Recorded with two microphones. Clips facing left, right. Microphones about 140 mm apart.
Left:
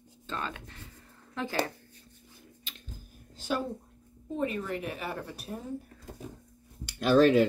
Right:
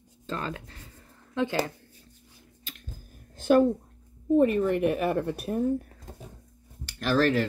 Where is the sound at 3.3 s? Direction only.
50° right (ahead or behind).